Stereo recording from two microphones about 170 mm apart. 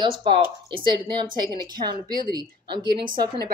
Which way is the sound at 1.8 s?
45° right (ahead or behind).